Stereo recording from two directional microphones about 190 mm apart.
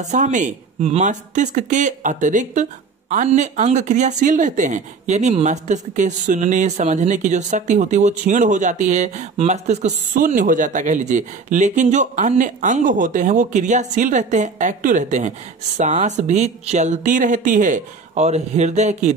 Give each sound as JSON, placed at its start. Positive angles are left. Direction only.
{"t": 0.0, "sound": "speech", "side_deg": -40}